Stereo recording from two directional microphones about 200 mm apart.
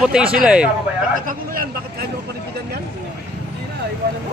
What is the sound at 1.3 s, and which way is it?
Speech, 45° right (ahead or behind).